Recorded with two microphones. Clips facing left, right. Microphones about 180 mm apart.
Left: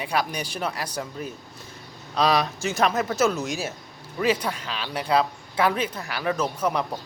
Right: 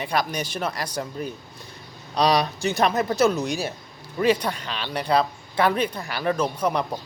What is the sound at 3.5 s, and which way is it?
Speech, centre (ahead or behind).